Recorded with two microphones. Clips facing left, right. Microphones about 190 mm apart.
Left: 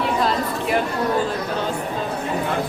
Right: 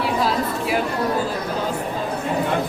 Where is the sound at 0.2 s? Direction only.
5° right (ahead or behind).